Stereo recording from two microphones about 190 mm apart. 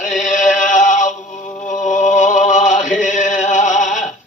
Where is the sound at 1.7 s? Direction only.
40° left (ahead or behind).